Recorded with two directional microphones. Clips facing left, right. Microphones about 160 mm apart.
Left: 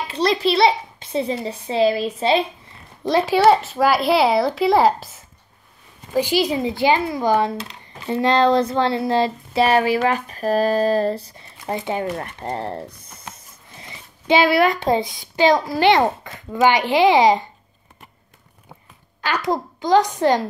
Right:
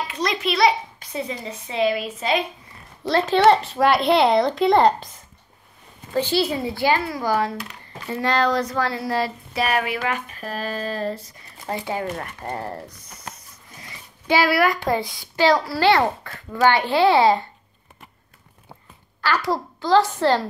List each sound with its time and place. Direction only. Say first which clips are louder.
0.1 s a child's voice: left 9 dB; 30° left (ahead or behind)
3.0 s speech: left 1 dB; 15° left (ahead or behind); by 11.4 s 35° left (ahead or behind)
11.6 s speech: left 3 dB; 20° left (ahead or behind)
19.2 s a child's voice: left 1 dB; 20° left (ahead or behind)